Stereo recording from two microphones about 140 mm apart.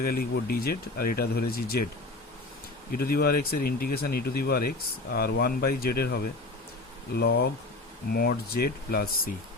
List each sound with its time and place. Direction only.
0.0 s speech: 90° left
2.9 s speech: 90° left
8.1 s speech: 90° left